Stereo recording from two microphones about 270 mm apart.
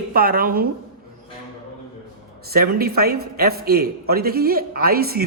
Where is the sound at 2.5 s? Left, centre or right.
Right.